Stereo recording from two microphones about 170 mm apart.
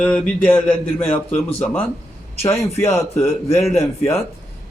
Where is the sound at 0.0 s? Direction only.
10° left (ahead or behind).